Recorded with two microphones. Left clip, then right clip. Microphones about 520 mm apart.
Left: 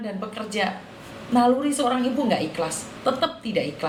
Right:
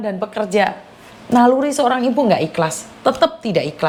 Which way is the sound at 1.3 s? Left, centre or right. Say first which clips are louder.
Right 7 dB; right.